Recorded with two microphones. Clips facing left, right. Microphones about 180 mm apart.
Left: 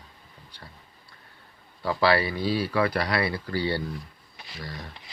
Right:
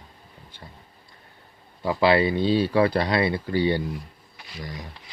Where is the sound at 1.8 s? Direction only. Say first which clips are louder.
Right 3 dB; 20° right (ahead or behind).